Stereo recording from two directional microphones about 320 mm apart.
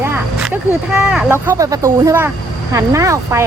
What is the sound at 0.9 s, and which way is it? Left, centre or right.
Speech, centre.